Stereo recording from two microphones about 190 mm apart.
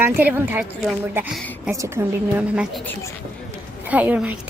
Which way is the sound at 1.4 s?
5° left (ahead or behind).